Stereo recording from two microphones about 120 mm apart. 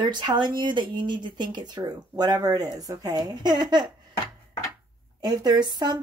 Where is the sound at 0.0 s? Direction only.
40° right (ahead or behind).